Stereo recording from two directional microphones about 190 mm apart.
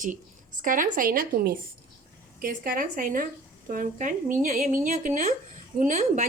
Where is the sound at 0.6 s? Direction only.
45° right (ahead or behind).